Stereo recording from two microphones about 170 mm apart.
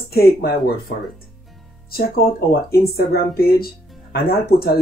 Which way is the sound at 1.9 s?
65° left (ahead or behind).